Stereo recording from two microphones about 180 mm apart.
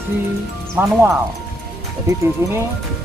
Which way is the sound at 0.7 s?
10° right (ahead or behind).